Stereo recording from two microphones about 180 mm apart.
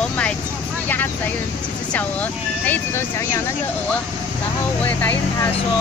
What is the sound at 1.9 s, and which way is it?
Speech, 10° left (ahead or behind).